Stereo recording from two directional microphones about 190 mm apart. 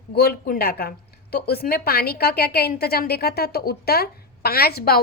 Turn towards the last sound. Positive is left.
turn(degrees=55)  # may be behind; listen again after turning